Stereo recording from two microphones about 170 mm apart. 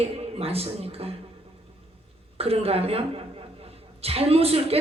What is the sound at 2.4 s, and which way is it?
A woman's voice, 35° right (ahead or behind).